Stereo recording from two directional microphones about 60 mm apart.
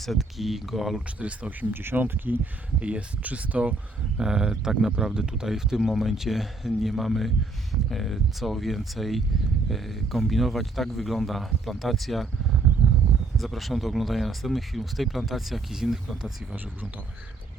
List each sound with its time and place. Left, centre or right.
0.0 s speech: centre
1.2 s speech: right
1.7 s speech: right
4.2 s speech: centre
13.3 s speech: centre